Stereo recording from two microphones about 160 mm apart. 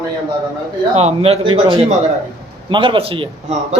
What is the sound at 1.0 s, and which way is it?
A man's voice, 40° right (ahead or behind).